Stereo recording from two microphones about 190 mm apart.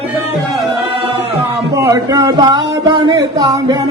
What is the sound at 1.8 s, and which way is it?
Speech, 20° right (ahead or behind).